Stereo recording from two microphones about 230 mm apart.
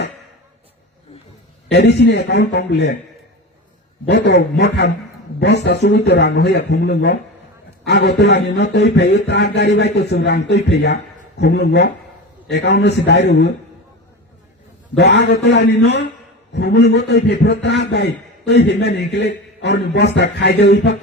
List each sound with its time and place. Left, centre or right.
1.7 s a man's voice: left
4.0 s a man's voice: left
14.9 s a man's voice: left